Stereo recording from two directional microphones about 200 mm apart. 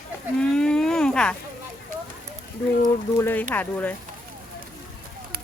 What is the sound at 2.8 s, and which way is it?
Speech, 10° left (ahead or behind).